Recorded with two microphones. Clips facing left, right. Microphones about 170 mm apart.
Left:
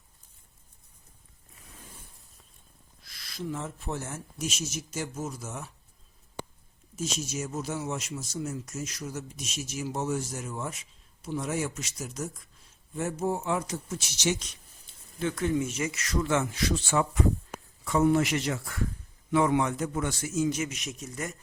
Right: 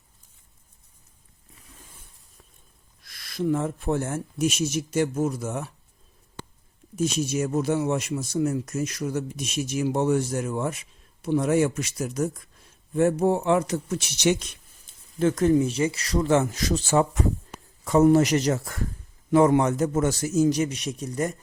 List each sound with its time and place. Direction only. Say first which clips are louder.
3.0 s speech: right 10 dB; 50° right (ahead or behind)
6.9 s speech: right 9 dB; 60° right (ahead or behind)
15.2 s a man's voice: right 8 dB; 45° right (ahead or behind)